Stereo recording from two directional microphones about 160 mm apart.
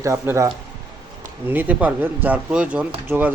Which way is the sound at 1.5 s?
10° right (ahead or behind).